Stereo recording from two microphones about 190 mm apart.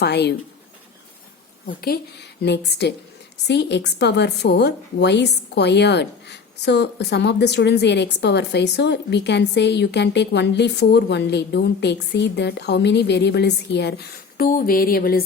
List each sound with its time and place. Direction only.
0.0 s a woman's voice: 60° left (ahead or behind)
1.6 s a woman's voice: 50° left (ahead or behind)
14.3 s a sound: 50° left (ahead or behind)